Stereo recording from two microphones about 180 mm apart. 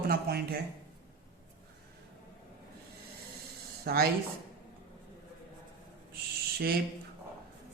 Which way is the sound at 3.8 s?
60° right (ahead or behind).